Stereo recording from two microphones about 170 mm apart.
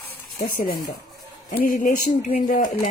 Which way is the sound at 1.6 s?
55° left (ahead or behind).